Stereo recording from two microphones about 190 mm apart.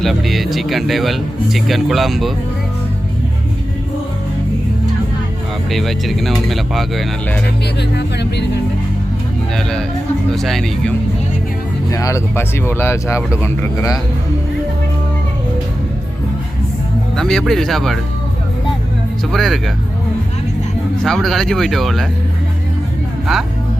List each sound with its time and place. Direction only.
0.0 s speech: centre (ahead or behind)
5.7 s speech: centre (ahead or behind)
7.8 s speech: 60° left (ahead or behind)
9.6 s speech: 5° left (ahead or behind)
11.9 s speech: 15° left (ahead or behind)
17.2 s speech: centre (ahead or behind)
19.3 s speech: centre (ahead or behind)
21.0 s speech: centre (ahead or behind)
23.3 s speech: centre (ahead or behind)